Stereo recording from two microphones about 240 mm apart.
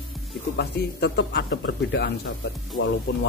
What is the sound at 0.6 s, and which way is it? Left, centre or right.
A man's voice, left.